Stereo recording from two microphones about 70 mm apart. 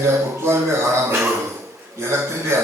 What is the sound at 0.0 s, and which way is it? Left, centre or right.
Speech, right.